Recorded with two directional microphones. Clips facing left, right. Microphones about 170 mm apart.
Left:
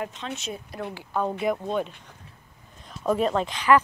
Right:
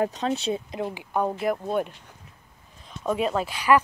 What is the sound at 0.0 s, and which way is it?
Speech, 35° right (ahead or behind).